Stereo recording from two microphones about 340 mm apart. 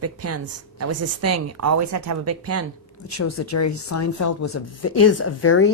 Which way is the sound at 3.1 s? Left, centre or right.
Left.